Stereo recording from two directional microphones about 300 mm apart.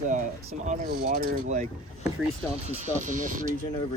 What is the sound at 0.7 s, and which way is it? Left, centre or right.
Speech, right.